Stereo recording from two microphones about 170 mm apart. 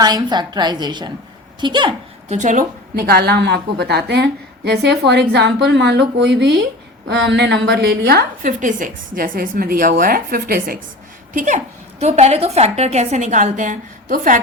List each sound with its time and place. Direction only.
0.0 s a woman's voice: 25° right (ahead or behind)
2.3 s a woman's voice: 45° right (ahead or behind)
11.3 s a woman's voice: 45° right (ahead or behind)